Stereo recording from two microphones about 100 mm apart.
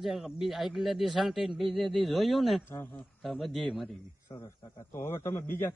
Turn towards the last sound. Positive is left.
turn(degrees=25)  # may be behind; listen again after turning